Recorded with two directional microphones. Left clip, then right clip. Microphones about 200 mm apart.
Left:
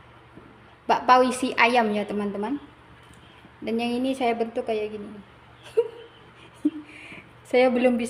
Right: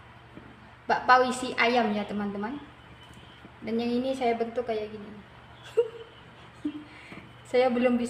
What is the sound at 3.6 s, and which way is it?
A woman's voice, 40° left (ahead or behind).